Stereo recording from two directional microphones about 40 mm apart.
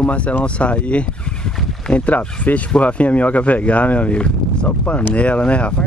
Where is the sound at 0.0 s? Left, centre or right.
Left.